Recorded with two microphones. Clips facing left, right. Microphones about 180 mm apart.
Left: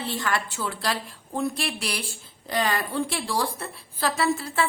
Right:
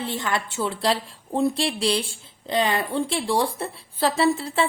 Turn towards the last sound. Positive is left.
turn(degrees=-25)  # may be behind; listen again after turning